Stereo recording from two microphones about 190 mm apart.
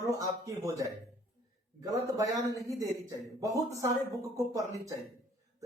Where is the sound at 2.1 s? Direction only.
20° right (ahead or behind).